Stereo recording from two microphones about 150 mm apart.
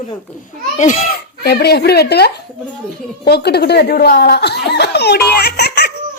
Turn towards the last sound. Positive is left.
turn(degrees=90)